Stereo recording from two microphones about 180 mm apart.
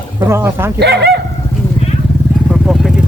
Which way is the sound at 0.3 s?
15° right (ahead or behind).